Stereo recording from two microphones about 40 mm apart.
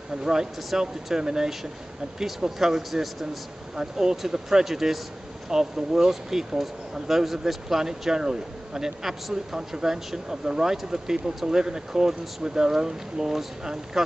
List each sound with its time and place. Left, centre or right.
0.1 s a man's voice: centre
3.7 s speech: centre